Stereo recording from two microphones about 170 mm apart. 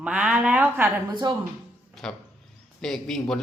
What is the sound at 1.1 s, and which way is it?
Speech, 25° right (ahead or behind).